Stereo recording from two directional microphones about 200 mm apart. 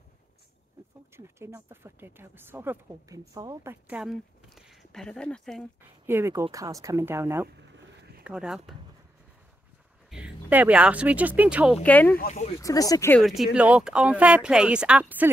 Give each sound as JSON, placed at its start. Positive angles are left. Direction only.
{"t": 1.1, "sound": "speech", "side_deg": -15}
{"t": 6.0, "sound": "speech", "side_deg": -10}
{"t": 10.0, "sound": "speech", "side_deg": -5}
{"t": 11.8, "sound": "speech", "side_deg": 10}
{"t": 12.2, "sound": "speech", "side_deg": 35}
{"t": 12.5, "sound": "speech", "side_deg": 15}
{"t": 13.2, "sound": "speech", "side_deg": 0}